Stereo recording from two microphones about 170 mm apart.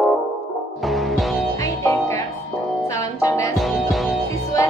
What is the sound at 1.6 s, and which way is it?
Music, 15° left (ahead or behind).